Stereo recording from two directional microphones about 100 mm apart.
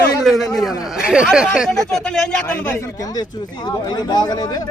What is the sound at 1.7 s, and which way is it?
Speech, 5° left (ahead or behind).